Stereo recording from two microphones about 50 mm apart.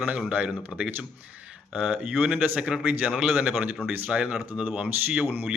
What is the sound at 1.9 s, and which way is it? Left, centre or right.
A man's voice, right.